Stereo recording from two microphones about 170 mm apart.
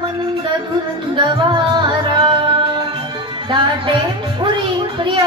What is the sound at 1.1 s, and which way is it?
Music, 25° right (ahead or behind).